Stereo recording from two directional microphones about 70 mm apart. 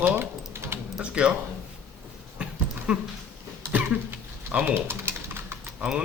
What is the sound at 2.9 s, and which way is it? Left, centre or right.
Speech, centre.